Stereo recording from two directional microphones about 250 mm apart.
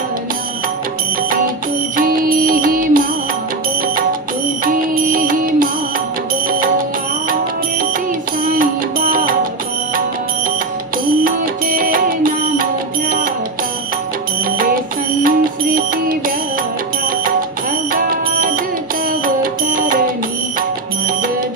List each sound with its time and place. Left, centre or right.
2.0 s music: right
5.0 s music: right
8.5 s music: right
11.2 s music: right
15.2 s music: right
19.2 s music: right